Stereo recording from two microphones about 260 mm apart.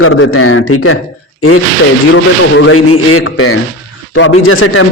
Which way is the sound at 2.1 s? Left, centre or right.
Left.